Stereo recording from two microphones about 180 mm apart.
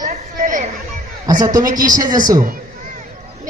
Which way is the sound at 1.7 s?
45° right (ahead or behind).